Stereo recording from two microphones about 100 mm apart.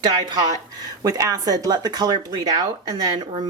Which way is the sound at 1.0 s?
35° right (ahead or behind).